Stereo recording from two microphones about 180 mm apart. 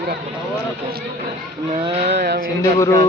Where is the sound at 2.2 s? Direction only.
65° right (ahead or behind).